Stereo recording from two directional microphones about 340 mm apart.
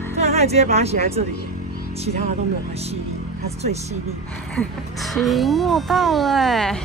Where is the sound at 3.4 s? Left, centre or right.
Centre.